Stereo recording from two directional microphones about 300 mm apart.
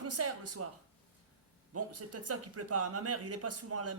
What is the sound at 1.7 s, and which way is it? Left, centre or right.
Speech, right.